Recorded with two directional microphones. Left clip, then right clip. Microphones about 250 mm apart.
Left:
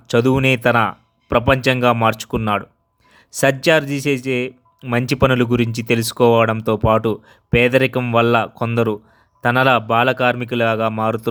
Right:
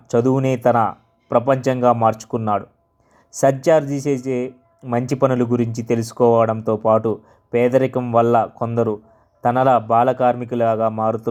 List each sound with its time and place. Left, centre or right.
0.1 s speech: left